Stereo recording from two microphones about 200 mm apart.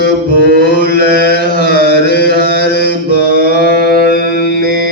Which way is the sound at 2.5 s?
55° left (ahead or behind).